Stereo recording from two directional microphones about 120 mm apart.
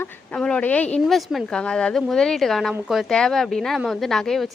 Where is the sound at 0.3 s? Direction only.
5° left (ahead or behind).